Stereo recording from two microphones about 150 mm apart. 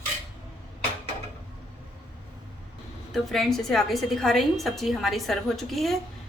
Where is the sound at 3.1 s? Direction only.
Centre (ahead or behind).